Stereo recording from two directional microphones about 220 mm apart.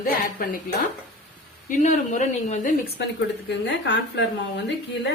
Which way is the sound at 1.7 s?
35° left (ahead or behind).